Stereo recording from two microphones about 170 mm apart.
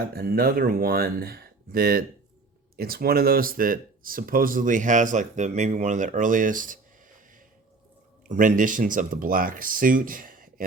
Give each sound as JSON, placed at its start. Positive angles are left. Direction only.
{"t": 0.1, "sound": "speech", "side_deg": -60}
{"t": 8.3, "sound": "speech", "side_deg": -50}